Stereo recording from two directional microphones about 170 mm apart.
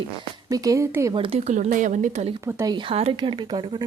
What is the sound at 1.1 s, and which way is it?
A woman's voice, 30° right (ahead or behind).